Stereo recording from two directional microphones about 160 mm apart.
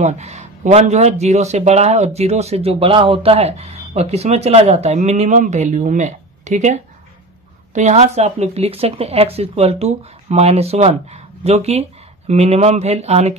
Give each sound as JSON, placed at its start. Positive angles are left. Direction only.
{"t": 0.0, "sound": "speech", "side_deg": -45}